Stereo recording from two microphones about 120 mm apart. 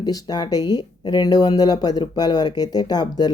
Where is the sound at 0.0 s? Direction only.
30° left (ahead or behind).